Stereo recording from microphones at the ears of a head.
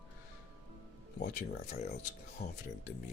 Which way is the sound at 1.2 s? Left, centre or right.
Left.